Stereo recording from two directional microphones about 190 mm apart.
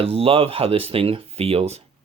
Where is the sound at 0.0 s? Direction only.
30° right (ahead or behind).